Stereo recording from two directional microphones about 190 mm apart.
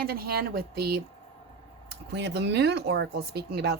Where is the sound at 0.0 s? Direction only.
55° right (ahead or behind).